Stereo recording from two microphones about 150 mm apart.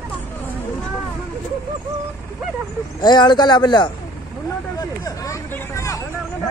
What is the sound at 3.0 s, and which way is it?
A man's voice, 30° left (ahead or behind).